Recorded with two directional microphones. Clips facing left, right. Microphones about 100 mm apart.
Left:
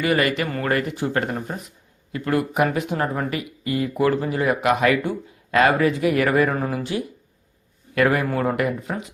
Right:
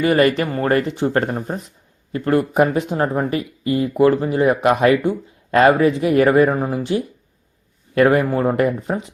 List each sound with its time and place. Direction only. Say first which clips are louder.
0.0 s speech: right 5 dB; 35° right (ahead or behind)